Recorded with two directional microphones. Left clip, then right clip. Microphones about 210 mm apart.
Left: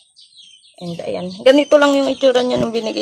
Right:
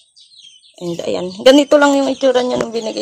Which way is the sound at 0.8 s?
40° right (ahead or behind).